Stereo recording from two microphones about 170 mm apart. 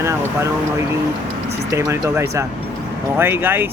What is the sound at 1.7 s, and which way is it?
Speech, 20° right (ahead or behind).